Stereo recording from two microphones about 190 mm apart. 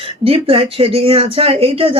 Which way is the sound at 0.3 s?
30° right (ahead or behind).